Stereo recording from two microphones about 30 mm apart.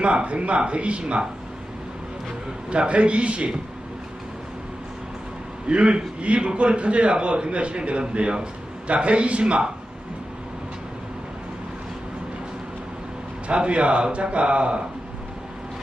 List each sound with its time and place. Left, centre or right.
0.0 s a man's voice: right
2.6 s a man's voice: right
5.6 s a man's voice: right
13.5 s a man's voice: right